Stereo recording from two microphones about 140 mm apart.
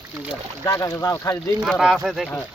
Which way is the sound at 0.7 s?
25° left (ahead or behind).